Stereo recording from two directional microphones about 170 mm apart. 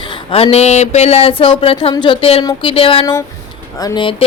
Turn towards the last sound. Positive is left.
turn(degrees=30)  # may be behind; listen again after turning